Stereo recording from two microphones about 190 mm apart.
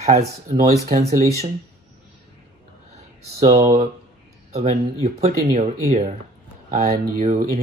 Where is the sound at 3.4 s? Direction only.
35° right (ahead or behind).